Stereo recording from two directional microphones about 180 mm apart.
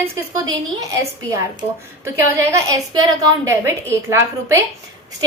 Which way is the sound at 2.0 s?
15° right (ahead or behind).